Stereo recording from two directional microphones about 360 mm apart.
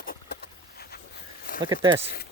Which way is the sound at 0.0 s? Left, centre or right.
Left.